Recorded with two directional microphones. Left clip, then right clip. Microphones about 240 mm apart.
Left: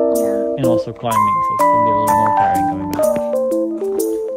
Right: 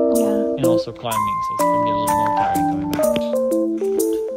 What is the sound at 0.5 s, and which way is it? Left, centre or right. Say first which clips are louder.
Music: left 2 dB; left.